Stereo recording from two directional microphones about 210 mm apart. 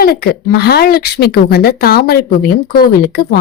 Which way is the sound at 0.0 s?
50° left (ahead or behind).